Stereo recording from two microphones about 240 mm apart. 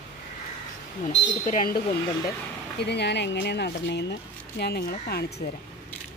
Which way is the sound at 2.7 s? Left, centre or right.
Left.